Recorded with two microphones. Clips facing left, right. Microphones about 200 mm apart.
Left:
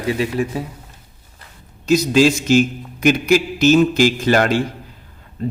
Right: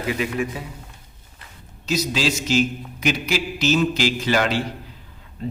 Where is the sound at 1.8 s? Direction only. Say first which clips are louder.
Left 9 dB; 50° left (ahead or behind).